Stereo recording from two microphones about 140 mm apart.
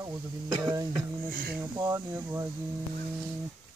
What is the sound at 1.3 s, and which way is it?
Speech, 90° right.